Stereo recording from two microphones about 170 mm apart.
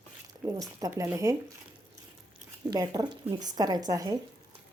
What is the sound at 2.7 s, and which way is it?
A woman's voice, 20° right (ahead or behind).